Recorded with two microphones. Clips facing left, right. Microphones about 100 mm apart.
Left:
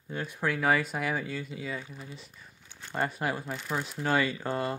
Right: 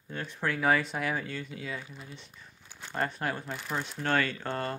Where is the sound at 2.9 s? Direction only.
5° left (ahead or behind).